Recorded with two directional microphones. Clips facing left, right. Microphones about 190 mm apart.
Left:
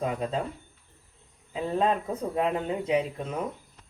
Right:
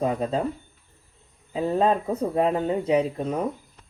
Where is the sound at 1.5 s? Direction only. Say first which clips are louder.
Right 4 dB; 35° right (ahead or behind).